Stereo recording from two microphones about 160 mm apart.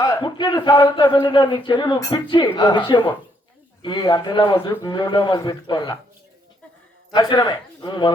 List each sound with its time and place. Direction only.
0.0 s a man's voice: 30° left (ahead or behind)
7.1 s speech: 25° left (ahead or behind)